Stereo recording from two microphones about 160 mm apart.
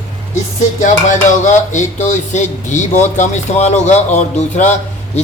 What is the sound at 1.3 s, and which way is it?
Speech, 50° left (ahead or behind).